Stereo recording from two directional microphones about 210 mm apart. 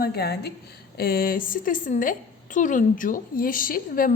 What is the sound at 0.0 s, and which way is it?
A woman's voice, 50° left (ahead or behind).